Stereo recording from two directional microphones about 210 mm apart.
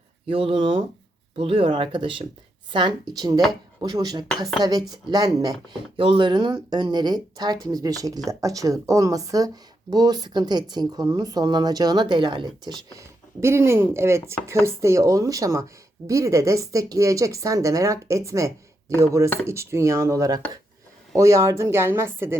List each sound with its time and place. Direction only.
0.3 s speech: 25° right (ahead or behind)